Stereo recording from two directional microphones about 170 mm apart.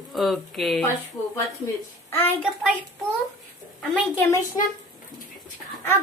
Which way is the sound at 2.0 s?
10° left (ahead or behind).